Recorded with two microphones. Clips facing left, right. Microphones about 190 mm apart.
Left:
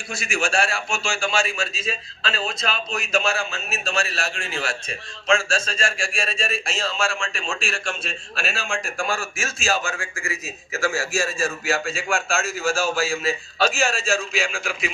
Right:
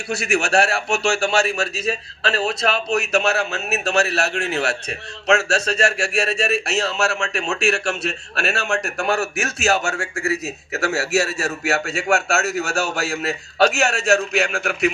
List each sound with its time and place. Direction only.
0.1 s a man's voice: 65° right (ahead or behind)